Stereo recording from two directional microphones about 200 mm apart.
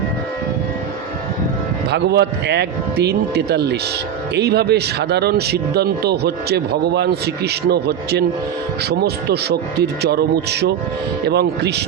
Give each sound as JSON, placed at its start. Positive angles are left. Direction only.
{"t": 1.9, "sound": "a man's voice", "side_deg": -55}